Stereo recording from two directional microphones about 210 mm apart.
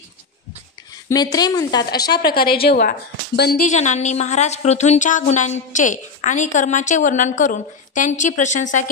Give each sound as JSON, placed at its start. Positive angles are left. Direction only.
{"t": 1.0, "sound": "a woman's voice", "side_deg": 20}
{"t": 2.2, "sound": "a woman's voice", "side_deg": 45}